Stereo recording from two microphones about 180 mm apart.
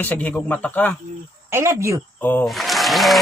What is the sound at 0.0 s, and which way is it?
Speech, 10° left (ahead or behind).